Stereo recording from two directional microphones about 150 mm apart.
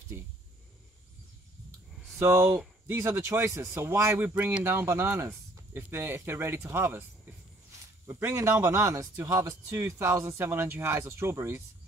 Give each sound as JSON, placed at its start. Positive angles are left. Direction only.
{"t": 2.1, "sound": "speech", "side_deg": -20}
{"t": 8.1, "sound": "speech", "side_deg": -15}